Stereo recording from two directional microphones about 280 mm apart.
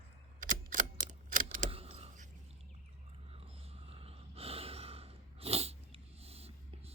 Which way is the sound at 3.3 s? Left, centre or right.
Right.